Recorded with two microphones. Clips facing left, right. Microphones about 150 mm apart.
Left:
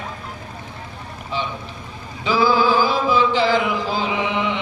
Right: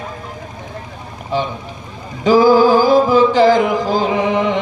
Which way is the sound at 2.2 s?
45° right (ahead or behind).